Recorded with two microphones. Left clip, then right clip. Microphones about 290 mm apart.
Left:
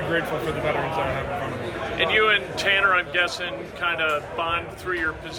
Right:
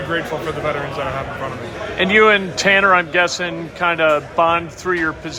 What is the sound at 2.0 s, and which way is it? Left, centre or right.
Speech, centre.